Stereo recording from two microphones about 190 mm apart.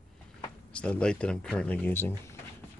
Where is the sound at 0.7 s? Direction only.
5° left (ahead or behind).